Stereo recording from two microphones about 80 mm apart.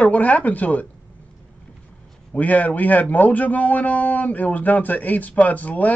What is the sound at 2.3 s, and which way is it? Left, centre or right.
A man's voice, centre.